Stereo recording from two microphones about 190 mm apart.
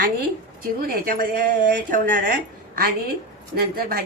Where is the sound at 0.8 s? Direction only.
50° right (ahead or behind).